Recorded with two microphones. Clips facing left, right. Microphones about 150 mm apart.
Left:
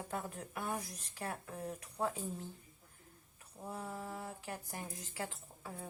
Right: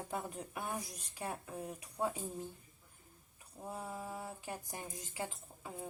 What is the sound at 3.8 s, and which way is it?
Speech, 10° right (ahead or behind).